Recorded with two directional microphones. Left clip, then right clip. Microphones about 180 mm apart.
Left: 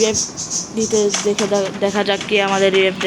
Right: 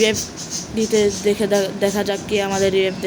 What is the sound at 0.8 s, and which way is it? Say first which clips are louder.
Speech: even; 15° right (ahead or behind).